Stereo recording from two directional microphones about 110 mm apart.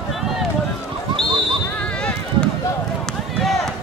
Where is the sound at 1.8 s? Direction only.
10° left (ahead or behind).